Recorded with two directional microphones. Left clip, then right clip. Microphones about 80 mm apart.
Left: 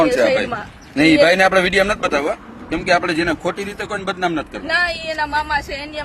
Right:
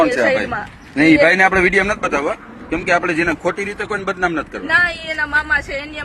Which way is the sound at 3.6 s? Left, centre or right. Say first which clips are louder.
Right 2 dB; left.